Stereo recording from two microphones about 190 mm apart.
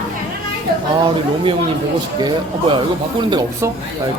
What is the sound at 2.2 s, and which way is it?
Speech, 25° right (ahead or behind).